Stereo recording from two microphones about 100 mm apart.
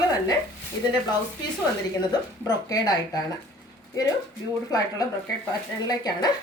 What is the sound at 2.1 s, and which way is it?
A woman's voice, 40° left (ahead or behind).